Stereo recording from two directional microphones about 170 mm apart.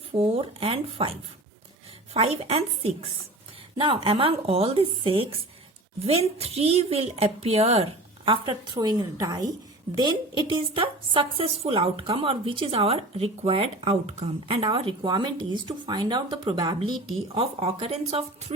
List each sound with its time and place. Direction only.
0.1 s a woman's voice: 35° right (ahead or behind)
2.1 s a woman's voice: 35° right (ahead or behind)